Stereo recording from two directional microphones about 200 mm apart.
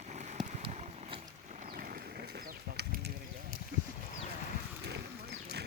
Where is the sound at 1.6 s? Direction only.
45° right (ahead or behind).